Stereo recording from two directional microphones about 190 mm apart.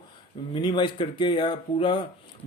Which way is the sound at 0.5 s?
25° left (ahead or behind).